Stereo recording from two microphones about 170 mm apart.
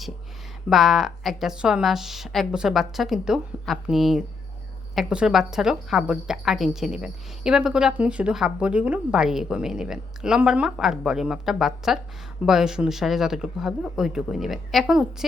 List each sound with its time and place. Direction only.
0.7 s a woman's voice: centre (ahead or behind)